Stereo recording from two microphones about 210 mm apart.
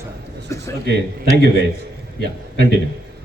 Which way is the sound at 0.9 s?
50° right (ahead or behind).